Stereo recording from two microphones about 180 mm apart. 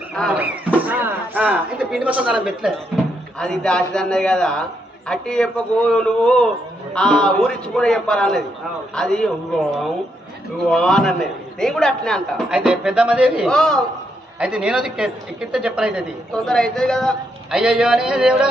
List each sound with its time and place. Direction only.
0.3 s a sound: 10° right (ahead or behind)
3.3 s a man's voice: 5° left (ahead or behind)
10.7 s a man's voice: 5° left (ahead or behind)